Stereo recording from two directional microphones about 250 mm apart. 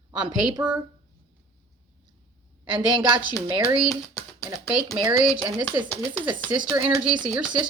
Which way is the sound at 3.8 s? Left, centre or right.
Centre.